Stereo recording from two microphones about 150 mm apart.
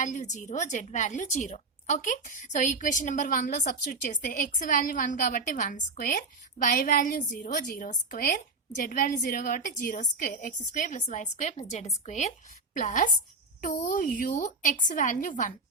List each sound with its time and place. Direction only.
0.0 s a woman's voice: 55° left (ahead or behind)